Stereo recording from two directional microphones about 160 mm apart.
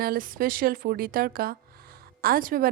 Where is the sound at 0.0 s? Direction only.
65° right (ahead or behind).